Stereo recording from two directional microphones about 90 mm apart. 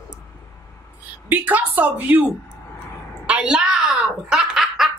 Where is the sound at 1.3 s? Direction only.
20° right (ahead or behind).